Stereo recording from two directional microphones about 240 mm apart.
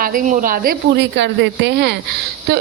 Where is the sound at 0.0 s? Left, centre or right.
Right.